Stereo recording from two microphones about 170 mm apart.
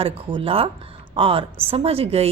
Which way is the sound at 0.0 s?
30° right (ahead or behind).